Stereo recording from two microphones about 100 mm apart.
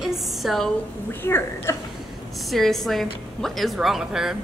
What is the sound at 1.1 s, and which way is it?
Speech, 25° left (ahead or behind).